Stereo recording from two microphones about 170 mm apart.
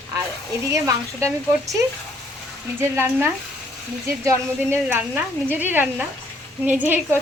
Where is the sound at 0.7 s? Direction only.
20° right (ahead or behind).